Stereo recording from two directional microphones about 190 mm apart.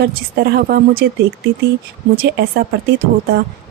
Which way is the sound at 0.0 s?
55° right (ahead or behind).